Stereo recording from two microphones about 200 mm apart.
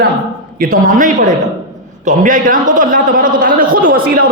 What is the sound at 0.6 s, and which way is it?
A man's voice, 40° right (ahead or behind).